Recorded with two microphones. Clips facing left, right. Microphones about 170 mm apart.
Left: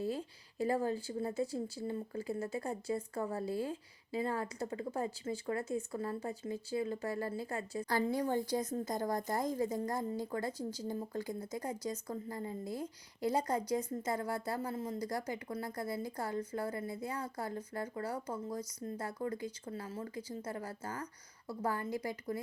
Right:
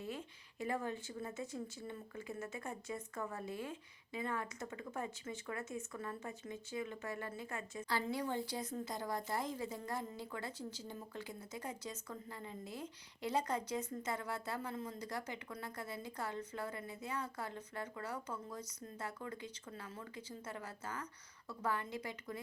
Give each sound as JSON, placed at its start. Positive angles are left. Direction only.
{"t": 0.0, "sound": "speech", "side_deg": 35}